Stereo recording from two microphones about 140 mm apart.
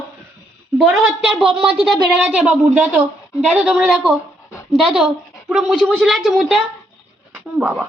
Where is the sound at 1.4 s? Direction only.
5° right (ahead or behind).